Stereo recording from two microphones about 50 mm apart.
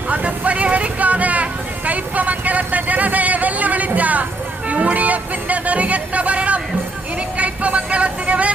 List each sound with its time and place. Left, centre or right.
0.1 s vehicle: right
4.7 s music: right